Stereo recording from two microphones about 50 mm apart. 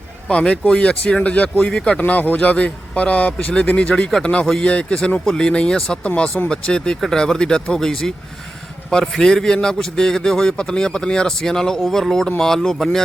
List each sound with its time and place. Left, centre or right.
0.3 s a man's voice: left